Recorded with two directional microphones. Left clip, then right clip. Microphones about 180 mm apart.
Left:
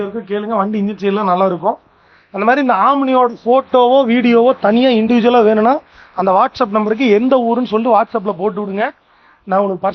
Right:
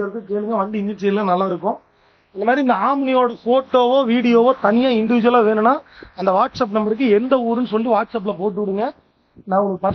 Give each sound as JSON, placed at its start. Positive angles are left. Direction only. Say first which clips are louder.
{"t": 0.5, "sound": "speech", "louder": "left 4 dB", "side_deg": 25}